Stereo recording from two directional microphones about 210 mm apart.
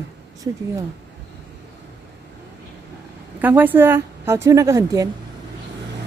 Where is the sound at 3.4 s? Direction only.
10° right (ahead or behind).